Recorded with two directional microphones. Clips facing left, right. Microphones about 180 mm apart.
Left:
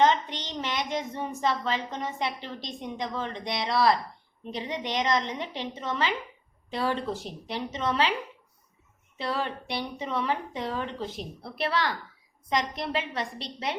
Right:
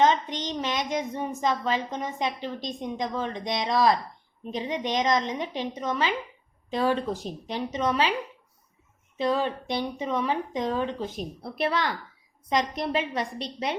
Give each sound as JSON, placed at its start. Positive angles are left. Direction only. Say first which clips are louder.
{"t": 0.0, "sound": "a woman's voice", "louder": "right 1 dB", "side_deg": -15}
{"t": 9.1, "sound": "a woman's voice", "louder": "right 5 dB", "side_deg": -15}